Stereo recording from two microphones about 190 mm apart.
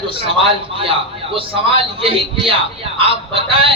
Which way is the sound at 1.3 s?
30° right (ahead or behind).